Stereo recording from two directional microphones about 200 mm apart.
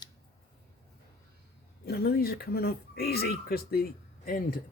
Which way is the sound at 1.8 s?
50° left (ahead or behind).